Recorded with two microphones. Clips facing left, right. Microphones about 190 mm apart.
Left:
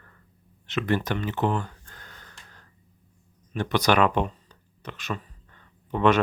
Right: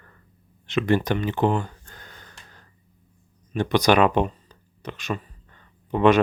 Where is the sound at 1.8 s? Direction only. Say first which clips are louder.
Right 2 dB; 15° right (ahead or behind).